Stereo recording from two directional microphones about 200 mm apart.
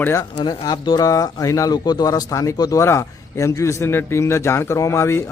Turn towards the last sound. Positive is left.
turn(degrees=15)  # may be behind; listen again after turning